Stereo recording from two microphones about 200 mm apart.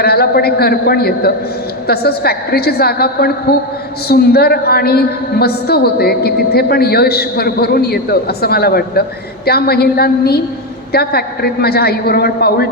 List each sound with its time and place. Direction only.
0.0 s a woman's voice: 50° left (ahead or behind)